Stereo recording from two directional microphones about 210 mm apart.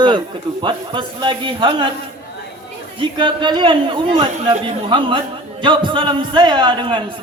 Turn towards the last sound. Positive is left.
turn(degrees=-25)  # may be behind; listen again after turning